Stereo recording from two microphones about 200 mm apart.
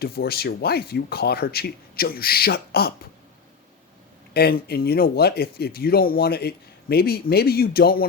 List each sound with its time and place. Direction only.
0.0 s speech: 50° left (ahead or behind)
4.4 s speech: 50° left (ahead or behind)